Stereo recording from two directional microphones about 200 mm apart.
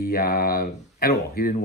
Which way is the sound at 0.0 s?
50° left (ahead or behind).